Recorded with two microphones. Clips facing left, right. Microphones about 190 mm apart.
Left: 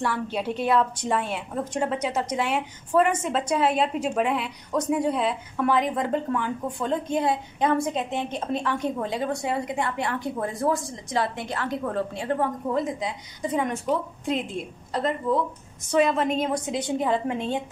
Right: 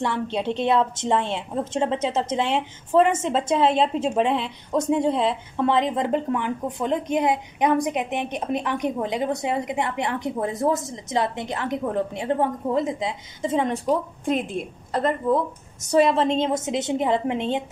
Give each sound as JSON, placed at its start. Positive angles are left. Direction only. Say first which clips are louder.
{"t": 0.0, "sound": "a woman's voice", "louder": "right 2 dB", "side_deg": -25}
{"t": 13.8, "sound": "a woman's voice", "louder": "right 3 dB", "side_deg": -50}
{"t": 15.8, "sound": "a woman's voice", "louder": "right 3 dB", "side_deg": -35}